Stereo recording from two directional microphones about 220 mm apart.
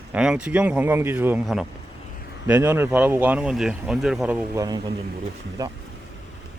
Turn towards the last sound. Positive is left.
turn(degrees=-15)  # may be behind; listen again after turning